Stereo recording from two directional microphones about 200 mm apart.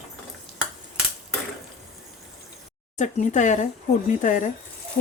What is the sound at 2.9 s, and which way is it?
Speech, 35° left (ahead or behind).